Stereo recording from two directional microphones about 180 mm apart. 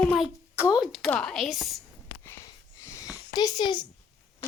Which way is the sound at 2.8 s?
15° left (ahead or behind).